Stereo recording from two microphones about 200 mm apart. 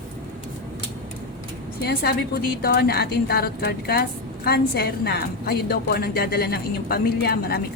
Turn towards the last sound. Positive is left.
turn(degrees=50)  # may be behind; listen again after turning